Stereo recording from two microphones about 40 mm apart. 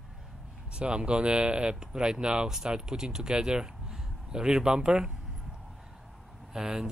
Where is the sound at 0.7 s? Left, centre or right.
Right.